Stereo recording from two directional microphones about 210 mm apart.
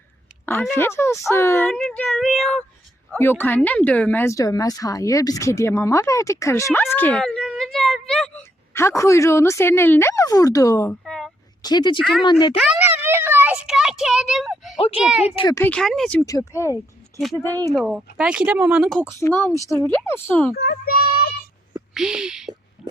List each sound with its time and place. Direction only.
0.4 s speech: 10° left (ahead or behind)
11.0 s a sound: centre (ahead or behind)
11.6 s speech: 20° left (ahead or behind)
11.9 s speech: centre (ahead or behind)
12.2 s speech: 20° left (ahead or behind)
12.5 s a sound: 5° right (ahead or behind)
14.9 s speech: 5° right (ahead or behind)
15.2 s speech: 20° left (ahead or behind)
17.8 s speech: 5° right (ahead or behind)
20.7 s child singing: 45° left (ahead or behind)
21.7 s speech: 5° right (ahead or behind)
22.8 s pig: centre (ahead or behind)